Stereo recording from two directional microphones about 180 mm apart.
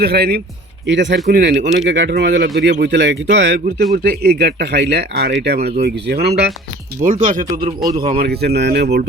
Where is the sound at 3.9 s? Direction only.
60° right (ahead or behind).